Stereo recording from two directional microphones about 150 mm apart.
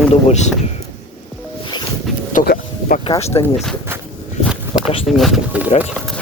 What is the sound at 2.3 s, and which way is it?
Vehicle, 90° left.